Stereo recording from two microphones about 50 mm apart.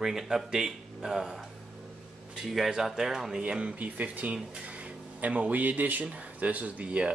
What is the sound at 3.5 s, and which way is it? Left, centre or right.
Speech, right.